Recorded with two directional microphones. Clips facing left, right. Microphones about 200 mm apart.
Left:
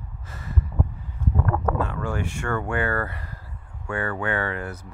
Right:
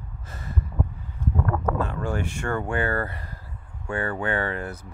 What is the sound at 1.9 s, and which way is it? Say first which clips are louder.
Speech: even; 35° right (ahead or behind).